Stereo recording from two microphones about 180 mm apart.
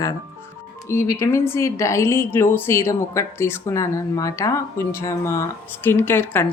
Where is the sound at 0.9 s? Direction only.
15° left (ahead or behind).